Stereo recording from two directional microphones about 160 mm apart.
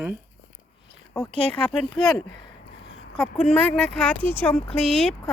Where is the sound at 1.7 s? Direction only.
5° left (ahead or behind).